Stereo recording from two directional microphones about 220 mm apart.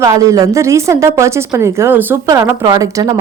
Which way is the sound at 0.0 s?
15° right (ahead or behind).